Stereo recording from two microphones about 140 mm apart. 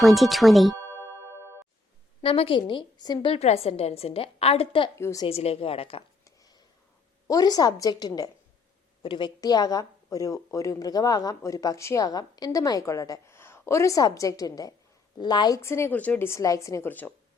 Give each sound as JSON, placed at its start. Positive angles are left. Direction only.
{"t": 0.0, "sound": "speech", "side_deg": 0}
{"t": 2.2, "sound": "a woman's voice", "side_deg": 40}
{"t": 3.3, "sound": "a woman's voice", "side_deg": 45}
{"t": 4.9, "sound": "a woman's voice", "side_deg": 20}
{"t": 5.2, "sound": "a woman's voice", "side_deg": 45}
{"t": 6.2, "sound": "a sound", "side_deg": 25}
{"t": 7.3, "sound": "a woman's voice", "side_deg": 25}